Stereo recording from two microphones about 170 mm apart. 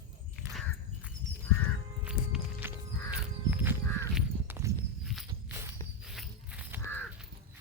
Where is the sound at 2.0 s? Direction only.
10° right (ahead or behind).